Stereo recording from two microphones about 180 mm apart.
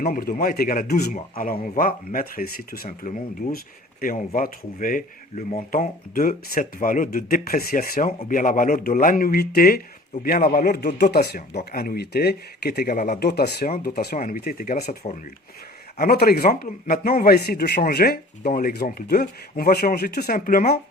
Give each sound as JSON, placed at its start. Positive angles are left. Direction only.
{"t": 0.0, "sound": "a man's voice", "side_deg": 50}
{"t": 13.7, "sound": "a man's voice", "side_deg": 45}
{"t": 15.0, "sound": "speech", "side_deg": 40}
{"t": 16.0, "sound": "a man's voice", "side_deg": 55}